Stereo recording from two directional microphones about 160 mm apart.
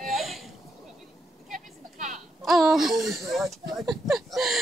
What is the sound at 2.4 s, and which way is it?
Speech, centre (ahead or behind).